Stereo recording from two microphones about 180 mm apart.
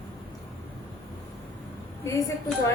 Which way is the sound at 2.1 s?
15° left (ahead or behind).